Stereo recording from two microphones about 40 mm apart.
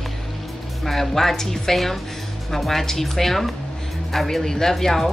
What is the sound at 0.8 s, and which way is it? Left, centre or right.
A woman's voice, centre.